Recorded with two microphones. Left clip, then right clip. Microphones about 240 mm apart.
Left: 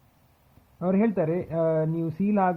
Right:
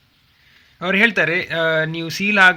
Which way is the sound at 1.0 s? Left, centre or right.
Right.